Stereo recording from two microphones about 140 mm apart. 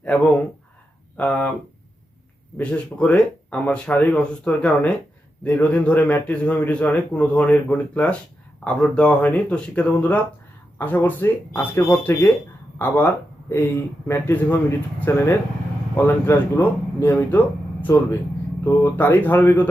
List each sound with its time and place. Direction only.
0.0 s speech: 10° left (ahead or behind)
1.1 s a sound: 10° left (ahead or behind)
2.6 s a man's voice: 10° left (ahead or behind)